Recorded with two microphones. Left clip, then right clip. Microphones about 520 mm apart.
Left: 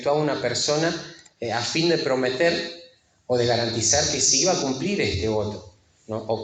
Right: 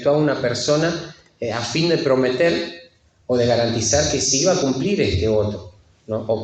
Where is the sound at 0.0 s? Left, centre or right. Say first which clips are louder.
Right 4 dB; right.